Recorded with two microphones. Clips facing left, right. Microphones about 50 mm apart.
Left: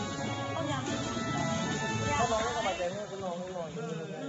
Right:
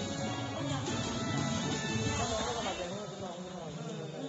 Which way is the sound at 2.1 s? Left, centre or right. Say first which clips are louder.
Left 8 dB; left.